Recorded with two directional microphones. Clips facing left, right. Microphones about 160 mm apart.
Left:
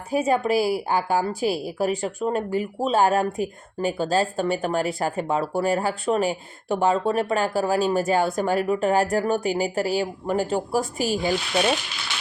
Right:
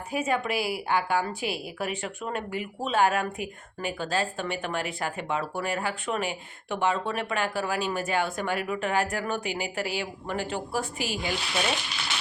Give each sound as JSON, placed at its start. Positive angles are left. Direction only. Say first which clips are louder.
{"t": 0.1, "sound": "a woman's voice", "louder": "left 7 dB", "side_deg": 40}